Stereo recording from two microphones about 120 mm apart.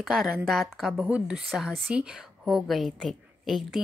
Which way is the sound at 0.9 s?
10° right (ahead or behind).